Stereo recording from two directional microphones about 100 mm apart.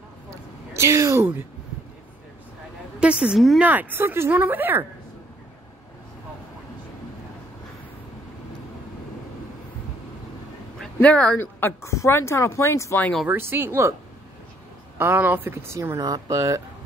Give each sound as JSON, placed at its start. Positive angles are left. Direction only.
{"t": 0.7, "sound": "a sound", "side_deg": -30}
{"t": 3.0, "sound": "a woman's voice", "side_deg": -10}
{"t": 3.6, "sound": "speech", "side_deg": -20}
{"t": 11.0, "sound": "speech", "side_deg": 15}
{"t": 11.6, "sound": "speech", "side_deg": 30}
{"t": 13.3, "sound": "speech", "side_deg": -25}
{"t": 15.0, "sound": "speech", "side_deg": -20}
{"t": 16.0, "sound": "speech", "side_deg": -40}
{"t": 16.3, "sound": "speech", "side_deg": -30}